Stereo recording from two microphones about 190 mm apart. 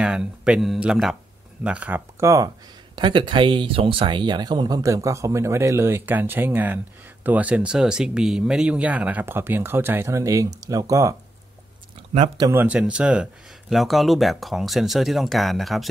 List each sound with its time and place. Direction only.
0.0 s speech: 5° right (ahead or behind)
12.4 s speech: 15° right (ahead or behind)